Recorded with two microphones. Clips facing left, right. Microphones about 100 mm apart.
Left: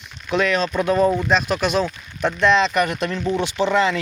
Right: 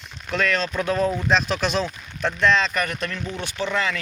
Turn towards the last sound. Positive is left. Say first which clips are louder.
# left 6 dB
turn(degrees=25)  # may be behind; listen again after turning